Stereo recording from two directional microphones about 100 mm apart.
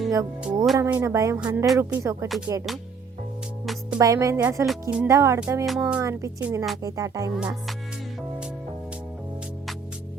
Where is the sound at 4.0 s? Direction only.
35° right (ahead or behind).